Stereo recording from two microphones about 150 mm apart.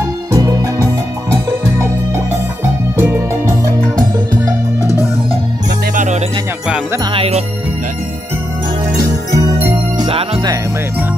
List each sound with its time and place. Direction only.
0.3 s music: 20° right (ahead or behind)
5.9 s music: 50° right (ahead or behind)
7.1 s music: 40° right (ahead or behind)
9.9 s music: 35° right (ahead or behind)